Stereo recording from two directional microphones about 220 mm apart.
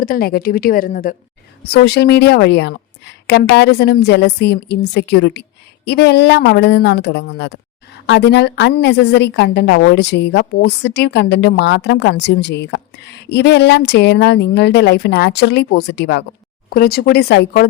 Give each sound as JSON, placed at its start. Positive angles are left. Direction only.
{"t": 0.0, "sound": "a woman's voice", "side_deg": 40}